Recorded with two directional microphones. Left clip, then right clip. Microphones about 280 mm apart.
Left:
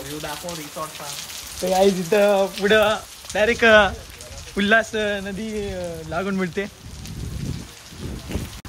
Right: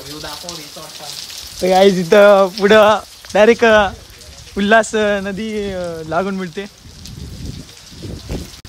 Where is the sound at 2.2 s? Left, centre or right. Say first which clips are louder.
Right 9 dB; right.